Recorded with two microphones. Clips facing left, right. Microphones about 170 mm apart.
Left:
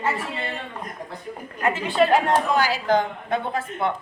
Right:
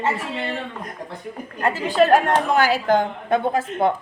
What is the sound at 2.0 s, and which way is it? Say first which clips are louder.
A woman's voice: right 3 dB; 50° right (ahead or behind).